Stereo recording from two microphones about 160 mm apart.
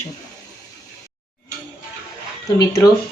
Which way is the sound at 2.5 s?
25° left (ahead or behind).